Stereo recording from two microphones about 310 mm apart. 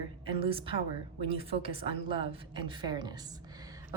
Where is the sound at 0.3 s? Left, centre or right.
Centre.